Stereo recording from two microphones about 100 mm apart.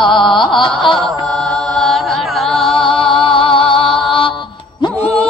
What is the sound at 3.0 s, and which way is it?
Music, 60° left (ahead or behind).